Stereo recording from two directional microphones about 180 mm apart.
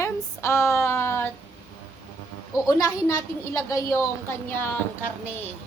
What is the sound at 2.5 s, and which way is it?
A woman's voice, 20° left (ahead or behind).